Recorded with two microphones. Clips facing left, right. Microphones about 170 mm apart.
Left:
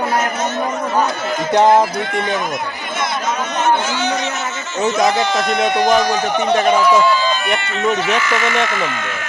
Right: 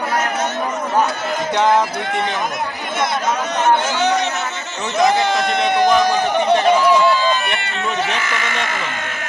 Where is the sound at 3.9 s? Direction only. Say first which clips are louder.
Right 2 dB; 60° right (ahead or behind).